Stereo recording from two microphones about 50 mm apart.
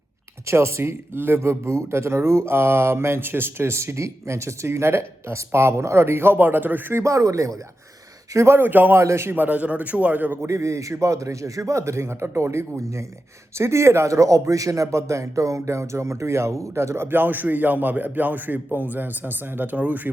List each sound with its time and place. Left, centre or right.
0.4 s speech: right
1.4 s speech: right
6.9 s speech: right
8.5 s speech: right
9.0 s a man's voice: right
9.3 s speech: right
10.4 s a man's voice: right
17.1 s speech: right